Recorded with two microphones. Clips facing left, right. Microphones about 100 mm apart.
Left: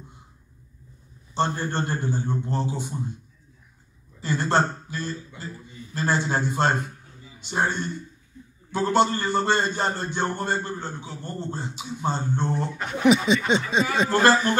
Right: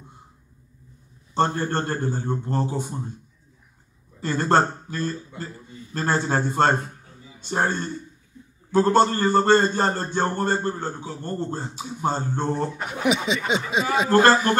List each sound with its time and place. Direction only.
1.3 s a man's voice: 45° right (ahead or behind)
4.2 s a man's voice: 45° right (ahead or behind)
12.8 s speech: 5° right (ahead or behind)